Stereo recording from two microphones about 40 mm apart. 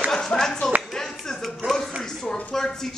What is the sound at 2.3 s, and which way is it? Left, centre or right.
Speech, centre.